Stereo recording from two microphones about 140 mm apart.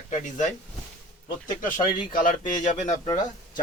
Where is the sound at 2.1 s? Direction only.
70° left (ahead or behind).